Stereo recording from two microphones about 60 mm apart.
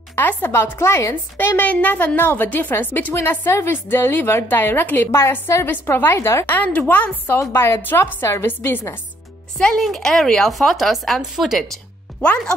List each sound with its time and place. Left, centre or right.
0.1 s a woman's voice: left
1.7 s a woman's voice: left
5.1 s a woman's voice: left
5.7 s a woman's voice: left
6.4 s a woman's voice: left
7.3 s a woman's voice: left
8.5 s a woman's voice: left
9.8 s speech: centre
12.2 s speech: centre